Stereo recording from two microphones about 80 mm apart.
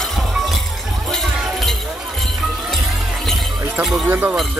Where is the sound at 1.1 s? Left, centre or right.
Centre.